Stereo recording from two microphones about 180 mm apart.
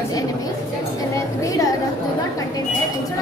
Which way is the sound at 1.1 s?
20° left (ahead or behind).